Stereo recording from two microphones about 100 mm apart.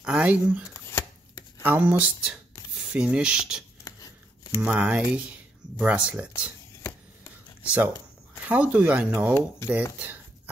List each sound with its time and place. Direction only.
0.0 s speech: 10° right (ahead or behind)
2.2 s speech: 5° right (ahead or behind)
3.8 s a sound: 35° left (ahead or behind)
4.6 s speech: 15° right (ahead or behind)
7.6 s speech: 15° right (ahead or behind)
9.9 s a sound: 20° right (ahead or behind)